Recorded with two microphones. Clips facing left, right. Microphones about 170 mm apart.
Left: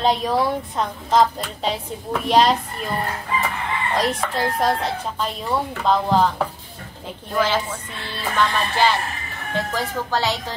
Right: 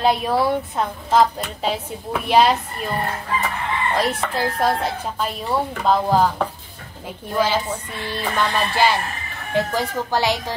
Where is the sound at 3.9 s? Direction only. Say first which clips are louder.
Left 1 dB; 10° right (ahead or behind).